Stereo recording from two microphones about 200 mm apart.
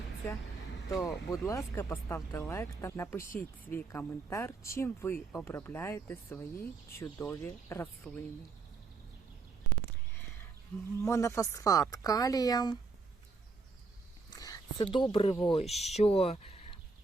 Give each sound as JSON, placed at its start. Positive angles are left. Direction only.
{"t": 0.9, "sound": "speech", "side_deg": 0}
{"t": 1.5, "sound": "speech", "side_deg": 15}
{"t": 11.0, "sound": "speech", "side_deg": 15}
{"t": 14.3, "sound": "speech", "side_deg": 20}
{"t": 15.6, "sound": "speech", "side_deg": 0}
{"t": 15.9, "sound": "speech", "side_deg": 30}